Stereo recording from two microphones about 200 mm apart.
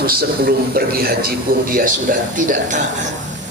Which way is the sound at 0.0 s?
50° right (ahead or behind).